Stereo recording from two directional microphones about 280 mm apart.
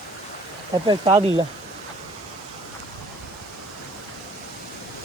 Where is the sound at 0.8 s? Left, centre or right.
Centre.